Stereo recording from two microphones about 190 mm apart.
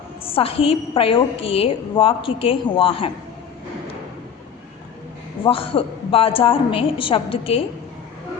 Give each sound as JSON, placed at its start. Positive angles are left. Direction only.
{"t": 0.3, "sound": "a woman's voice", "side_deg": 30}
{"t": 5.4, "sound": "a woman's voice", "side_deg": 30}